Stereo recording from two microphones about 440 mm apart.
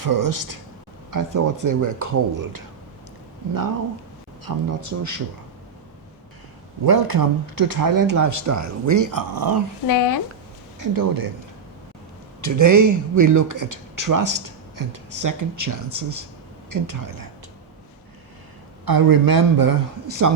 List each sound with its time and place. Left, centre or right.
0.0 s speech: right
4.4 s speech: right
6.8 s speech: right
9.8 s speech: left
10.8 s speech: right
12.4 s speech: right
18.9 s speech: right